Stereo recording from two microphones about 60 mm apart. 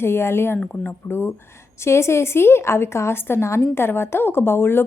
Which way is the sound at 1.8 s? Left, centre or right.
Left.